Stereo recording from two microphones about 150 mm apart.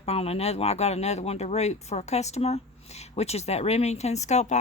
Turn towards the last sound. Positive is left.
turn(degrees=50)  # may be behind; listen again after turning